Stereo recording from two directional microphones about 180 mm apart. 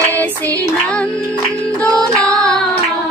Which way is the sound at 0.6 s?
5° left (ahead or behind).